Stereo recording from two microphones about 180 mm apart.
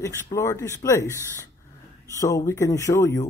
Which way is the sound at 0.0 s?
15° left (ahead or behind).